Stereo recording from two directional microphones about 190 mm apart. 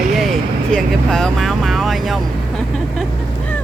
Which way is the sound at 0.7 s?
5° left (ahead or behind).